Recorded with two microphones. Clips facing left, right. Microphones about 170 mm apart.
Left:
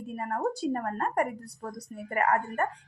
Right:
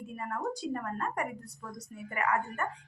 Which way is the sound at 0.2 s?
40° left (ahead or behind).